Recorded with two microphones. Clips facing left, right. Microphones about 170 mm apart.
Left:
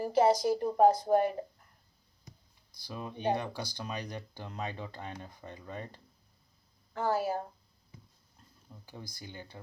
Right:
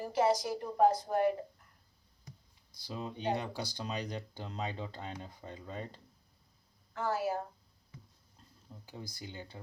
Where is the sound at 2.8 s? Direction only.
25° right (ahead or behind).